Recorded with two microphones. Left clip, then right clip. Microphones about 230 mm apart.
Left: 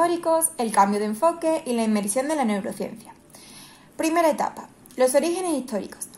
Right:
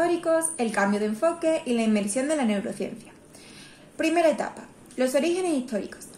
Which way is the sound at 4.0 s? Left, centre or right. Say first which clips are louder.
Left 1 dB; left.